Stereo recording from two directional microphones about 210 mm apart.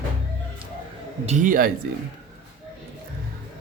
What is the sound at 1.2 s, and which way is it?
Speech, 35° right (ahead or behind).